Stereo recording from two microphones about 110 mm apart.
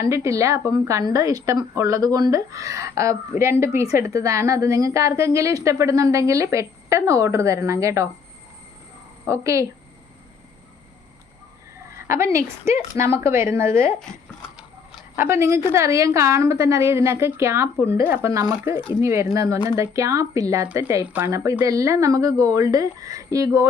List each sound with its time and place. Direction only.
0.0 s speech: 30° right (ahead or behind)
9.2 s speech: 30° right (ahead or behind)
11.9 s speech: 25° right (ahead or behind)
15.1 s speech: 25° right (ahead or behind)
18.8 s speech: 50° left (ahead or behind)
19.0 s speech: 25° right (ahead or behind)
21.0 s a woman's voice: 15° right (ahead or behind)